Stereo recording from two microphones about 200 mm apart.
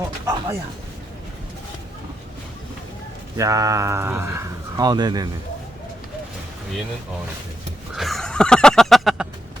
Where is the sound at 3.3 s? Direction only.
15° right (ahead or behind).